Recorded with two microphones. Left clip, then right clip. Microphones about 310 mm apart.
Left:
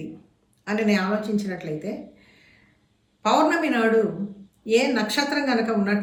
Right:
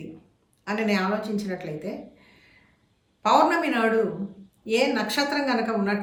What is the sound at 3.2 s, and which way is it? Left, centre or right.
A woman's voice, centre.